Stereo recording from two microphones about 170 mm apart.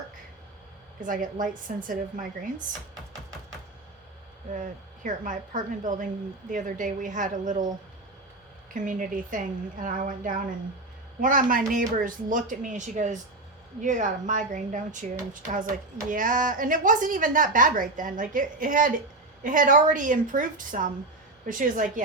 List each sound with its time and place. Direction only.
1.0 s a woman's voice: 50° right (ahead or behind)
4.5 s a woman's voice: 50° right (ahead or behind)
8.7 s a woman's voice: 50° right (ahead or behind)